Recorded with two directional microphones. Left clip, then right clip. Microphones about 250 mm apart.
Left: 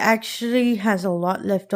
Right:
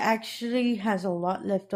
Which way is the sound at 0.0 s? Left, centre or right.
Left.